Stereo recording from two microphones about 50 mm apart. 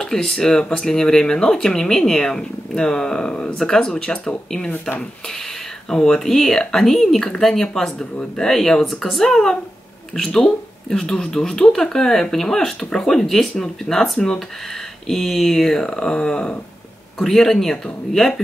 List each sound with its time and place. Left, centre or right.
0.0 s speech: centre
5.9 s speech: centre
17.2 s speech: centre